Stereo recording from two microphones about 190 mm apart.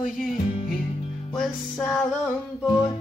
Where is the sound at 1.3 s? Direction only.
Centre (ahead or behind).